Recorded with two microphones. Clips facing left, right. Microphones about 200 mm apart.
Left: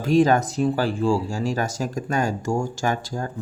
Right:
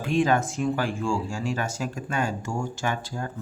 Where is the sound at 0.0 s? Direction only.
40° left (ahead or behind).